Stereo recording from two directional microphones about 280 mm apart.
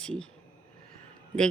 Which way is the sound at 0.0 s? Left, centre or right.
Centre.